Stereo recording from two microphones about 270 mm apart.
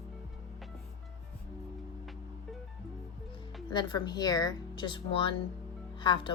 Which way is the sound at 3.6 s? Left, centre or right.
Centre.